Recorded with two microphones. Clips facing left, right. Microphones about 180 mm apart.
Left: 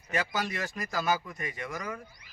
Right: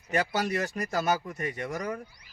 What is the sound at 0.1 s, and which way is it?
Speech, 40° right (ahead or behind).